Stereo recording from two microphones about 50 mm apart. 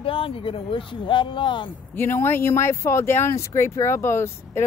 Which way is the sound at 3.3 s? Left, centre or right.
Left.